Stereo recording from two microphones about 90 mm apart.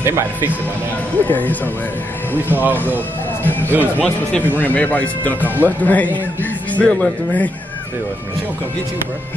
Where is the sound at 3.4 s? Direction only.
20° left (ahead or behind).